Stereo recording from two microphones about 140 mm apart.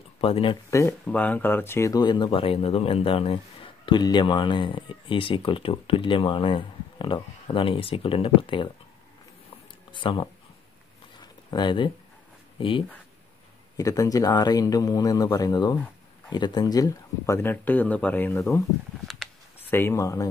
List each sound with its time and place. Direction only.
0.2 s speech: 40° left (ahead or behind)
0.7 s speech: 20° left (ahead or behind)
1.0 s speech: 10° left (ahead or behind); by 8.7 s 35° left (ahead or behind)
9.9 s speech: 35° left (ahead or behind)
11.1 s a sound: 30° left (ahead or behind)
12.5 s speech: 40° left (ahead or behind)
13.7 s speech: 25° left (ahead or behind)
19.7 s speech: 20° left (ahead or behind)